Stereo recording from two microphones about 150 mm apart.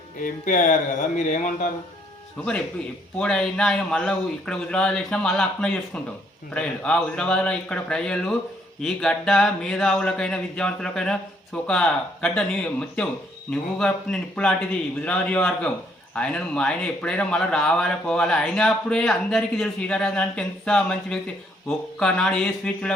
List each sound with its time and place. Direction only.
0.2 s speech: 60° left (ahead or behind)
3.2 s a man's voice: 5° left (ahead or behind)